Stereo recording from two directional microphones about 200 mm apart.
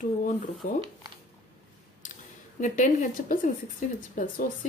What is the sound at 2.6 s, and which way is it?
Speech, 40° left (ahead or behind).